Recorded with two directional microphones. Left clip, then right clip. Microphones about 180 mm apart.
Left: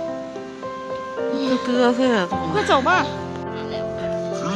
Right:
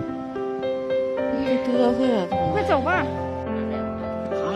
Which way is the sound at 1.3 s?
20° right (ahead or behind).